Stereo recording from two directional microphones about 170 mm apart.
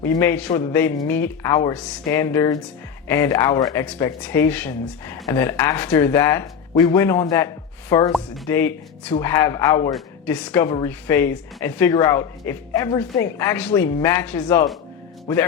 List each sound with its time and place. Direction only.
0.0 s speech: 15° left (ahead or behind)
3.8 s speech: 10° left (ahead or behind)